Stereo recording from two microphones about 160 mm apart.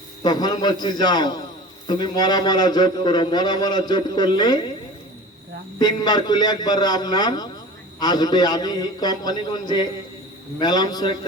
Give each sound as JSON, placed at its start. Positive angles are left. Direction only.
{"t": 0.2, "sound": "a man's voice", "side_deg": 25}
{"t": 5.8, "sound": "a man's voice", "side_deg": 25}